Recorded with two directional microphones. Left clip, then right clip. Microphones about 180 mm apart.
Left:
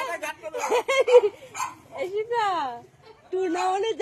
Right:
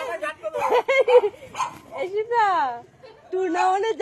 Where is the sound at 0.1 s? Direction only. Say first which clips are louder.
Right 3 dB; 90° left.